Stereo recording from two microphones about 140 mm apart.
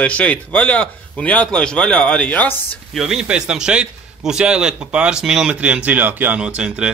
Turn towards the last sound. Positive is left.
turn(degrees=-5)  # may be behind; listen again after turning